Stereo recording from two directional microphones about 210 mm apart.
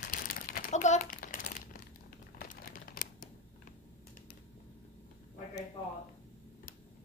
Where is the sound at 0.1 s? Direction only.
40° left (ahead or behind).